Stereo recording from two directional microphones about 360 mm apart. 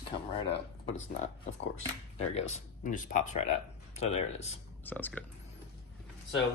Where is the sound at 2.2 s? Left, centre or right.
Centre.